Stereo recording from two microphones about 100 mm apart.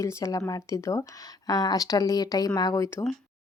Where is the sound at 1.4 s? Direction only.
40° left (ahead or behind).